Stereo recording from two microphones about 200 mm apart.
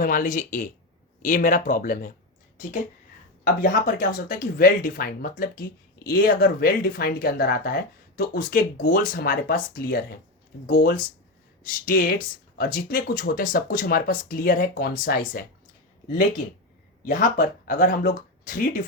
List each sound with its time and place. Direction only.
0.0 s speech: 45° left (ahead or behind)
3.4 s speech: 40° left (ahead or behind)
17.1 s speech: 40° left (ahead or behind)